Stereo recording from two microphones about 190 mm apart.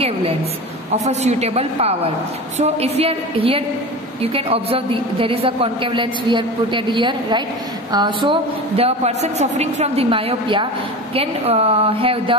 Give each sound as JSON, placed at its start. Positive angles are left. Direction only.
{"t": 0.9, "sound": "a woman's voice", "side_deg": -35}